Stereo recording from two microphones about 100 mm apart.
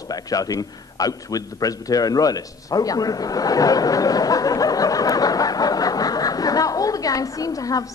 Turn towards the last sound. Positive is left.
turn(degrees=35)  # may be behind; listen again after turning